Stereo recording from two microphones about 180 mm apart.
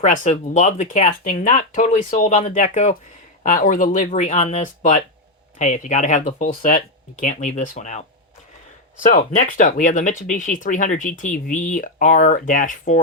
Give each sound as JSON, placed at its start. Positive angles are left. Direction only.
{"t": 0.0, "sound": "speech", "side_deg": 45}
{"t": 9.0, "sound": "speech", "side_deg": 50}